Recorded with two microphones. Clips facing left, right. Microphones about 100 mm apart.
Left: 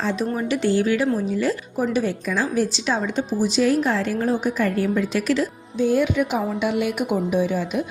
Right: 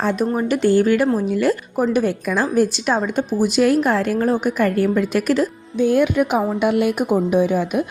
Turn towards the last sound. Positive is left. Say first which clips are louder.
# right 4 dB
turn(degrees=-55)  # may be behind; listen again after turning